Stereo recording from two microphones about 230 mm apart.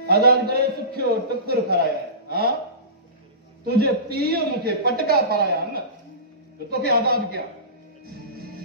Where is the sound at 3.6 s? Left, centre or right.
Right.